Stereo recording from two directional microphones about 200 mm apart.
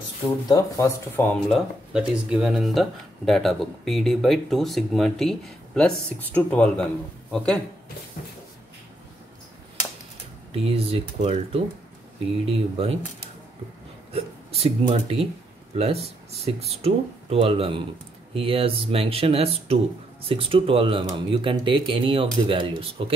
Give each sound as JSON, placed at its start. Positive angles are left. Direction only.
{"t": 0.5, "sound": "speech", "side_deg": 15}
{"t": 1.5, "sound": "a man's voice", "side_deg": -5}
{"t": 10.5, "sound": "speech", "side_deg": -30}
{"t": 14.1, "sound": "speech", "side_deg": -30}